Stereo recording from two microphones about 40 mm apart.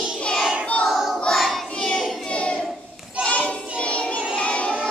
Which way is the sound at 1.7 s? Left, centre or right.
Centre.